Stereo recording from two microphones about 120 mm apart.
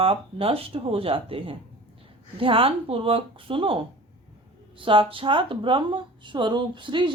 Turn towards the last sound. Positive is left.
turn(degrees=-40)  # may be behind; listen again after turning